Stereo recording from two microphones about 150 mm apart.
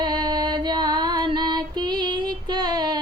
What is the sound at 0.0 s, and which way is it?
Female singing, 30° right (ahead or behind).